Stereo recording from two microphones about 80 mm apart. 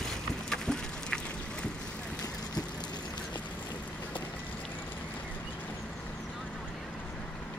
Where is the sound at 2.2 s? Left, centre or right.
Left.